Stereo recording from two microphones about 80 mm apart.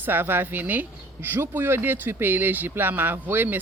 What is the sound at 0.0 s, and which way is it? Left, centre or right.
Speech, right.